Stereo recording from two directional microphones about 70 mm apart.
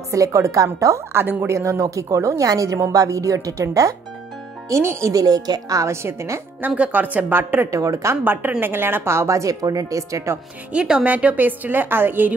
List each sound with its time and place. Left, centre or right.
0.1 s a woman's voice: right
1.1 s speech: right
1.5 s a woman's voice: right
5.2 s a woman's voice: right
6.9 s a woman's voice: right
7.7 s a woman's voice: right
8.2 s speech: right
10.7 s a woman's voice: centre; by 12.4 s right